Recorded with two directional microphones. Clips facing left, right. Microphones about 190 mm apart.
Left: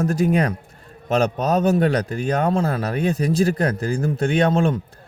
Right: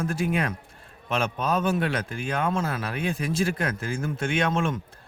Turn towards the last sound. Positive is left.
turn(degrees=35)  # may be behind; listen again after turning